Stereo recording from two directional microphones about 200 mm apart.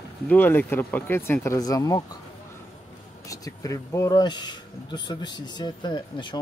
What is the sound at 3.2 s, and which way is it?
Speech, 15° left (ahead or behind).